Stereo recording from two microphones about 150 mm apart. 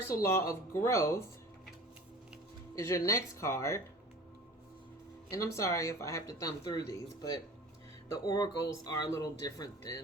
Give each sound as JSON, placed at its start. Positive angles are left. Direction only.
{"t": 0.1, "sound": "speech", "side_deg": 20}
{"t": 2.7, "sound": "speech", "side_deg": 20}
{"t": 5.3, "sound": "speech", "side_deg": 20}